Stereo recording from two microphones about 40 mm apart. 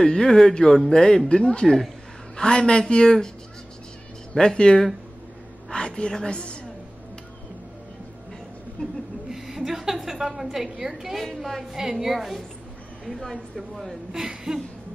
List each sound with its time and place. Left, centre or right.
0.0 s a woman's voice: centre
4.6 s a woman's voice: left
8.8 s speech: left
9.3 s a woman's voice: centre
11.3 s a woman's voice: centre
11.7 s a woman's voice: centre
14.1 s a woman's voice: centre